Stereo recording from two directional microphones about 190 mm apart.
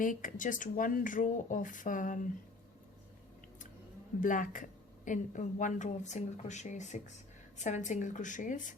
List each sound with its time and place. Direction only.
0.0 s speech: 45° left (ahead or behind)
4.2 s a woman's voice: 45° left (ahead or behind)